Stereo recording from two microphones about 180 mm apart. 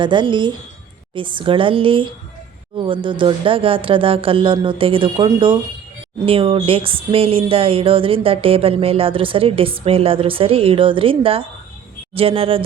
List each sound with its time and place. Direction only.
0.0 s speech: 25° right (ahead or behind)